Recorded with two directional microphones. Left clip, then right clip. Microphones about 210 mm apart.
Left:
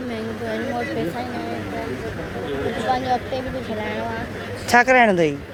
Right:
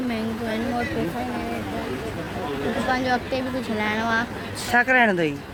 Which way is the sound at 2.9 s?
40° right (ahead or behind).